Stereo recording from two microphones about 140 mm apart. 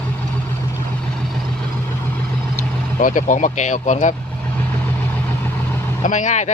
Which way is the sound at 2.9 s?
65° left (ahead or behind).